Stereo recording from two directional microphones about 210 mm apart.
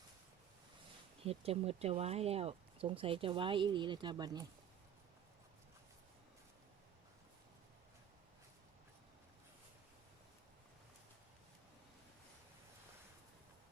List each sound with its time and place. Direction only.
1.2 s speech: 30° right (ahead or behind)